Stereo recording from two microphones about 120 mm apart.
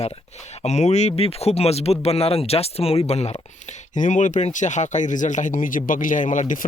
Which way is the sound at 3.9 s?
90° left.